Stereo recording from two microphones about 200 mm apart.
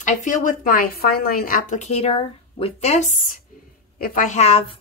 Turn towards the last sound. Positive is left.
turn(degrees=30)  # may be behind; listen again after turning